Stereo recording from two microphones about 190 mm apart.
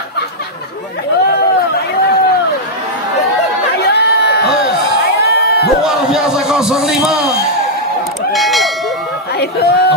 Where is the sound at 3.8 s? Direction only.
60° left (ahead or behind).